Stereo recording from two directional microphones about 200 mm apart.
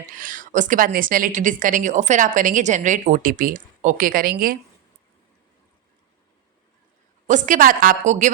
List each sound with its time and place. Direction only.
0.2 s a woman's voice: 45° right (ahead or behind)
7.3 s a woman's voice: 40° right (ahead or behind)